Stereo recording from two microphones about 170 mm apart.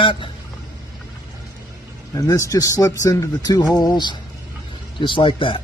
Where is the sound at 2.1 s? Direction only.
20° left (ahead or behind).